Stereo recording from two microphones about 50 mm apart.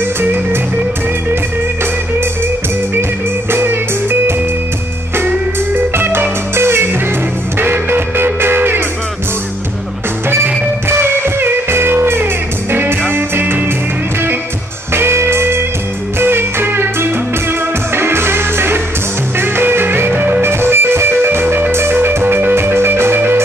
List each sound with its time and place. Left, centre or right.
0.2 s music: right
3.5 s music: right
5.9 s music: right
10.3 s music: right
15.0 s music: right